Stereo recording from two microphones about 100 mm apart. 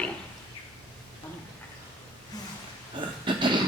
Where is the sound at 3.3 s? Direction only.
55° right (ahead or behind).